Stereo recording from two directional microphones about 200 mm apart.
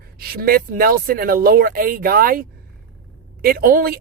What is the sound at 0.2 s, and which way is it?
Speech, 50° right (ahead or behind).